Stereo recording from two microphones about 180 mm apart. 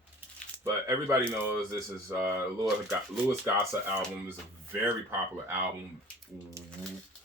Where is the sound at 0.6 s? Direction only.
15° right (ahead or behind).